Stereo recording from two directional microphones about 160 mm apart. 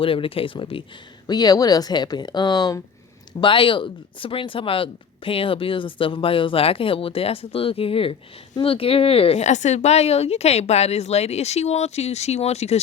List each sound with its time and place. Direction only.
0.0 s speech: 35° left (ahead or behind)